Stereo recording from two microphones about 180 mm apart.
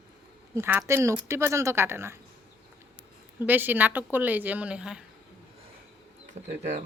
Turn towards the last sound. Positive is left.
turn(degrees=-40)  # may be behind; listen again after turning